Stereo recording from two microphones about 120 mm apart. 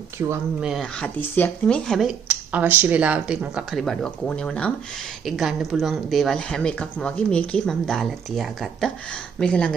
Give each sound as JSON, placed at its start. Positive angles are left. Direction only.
{"t": 0.2, "sound": "speech", "side_deg": -20}
{"t": 0.6, "sound": "speech", "side_deg": -5}
{"t": 0.9, "sound": "speech", "side_deg": 10}
{"t": 1.9, "sound": "speech", "side_deg": 0}
{"t": 2.2, "sound": "speech", "side_deg": -15}
{"t": 3.8, "sound": "speech", "side_deg": 5}
{"t": 5.2, "sound": "speech", "side_deg": 0}